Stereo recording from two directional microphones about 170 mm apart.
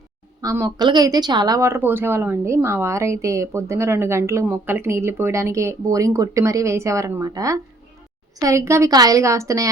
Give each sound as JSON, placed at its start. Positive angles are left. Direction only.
{"t": 0.4, "sound": "a woman's voice", "side_deg": -20}